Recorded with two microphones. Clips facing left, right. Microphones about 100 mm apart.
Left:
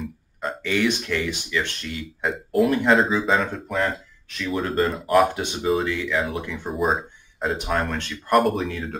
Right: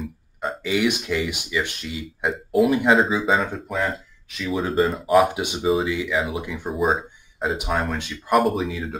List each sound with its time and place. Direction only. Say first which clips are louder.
0.0 s speech: right 1 dB; 5° right (ahead or behind)